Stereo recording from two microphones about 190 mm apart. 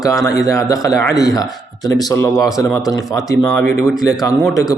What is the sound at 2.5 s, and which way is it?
Speech, 20° left (ahead or behind).